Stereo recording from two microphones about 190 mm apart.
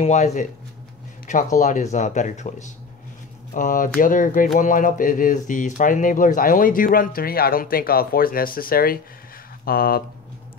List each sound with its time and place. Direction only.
0.0 s speech: 40° left (ahead or behind)
1.6 s speech: 40° left (ahead or behind)